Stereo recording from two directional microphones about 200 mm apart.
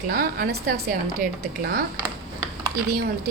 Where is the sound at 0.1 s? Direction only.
45° right (ahead or behind).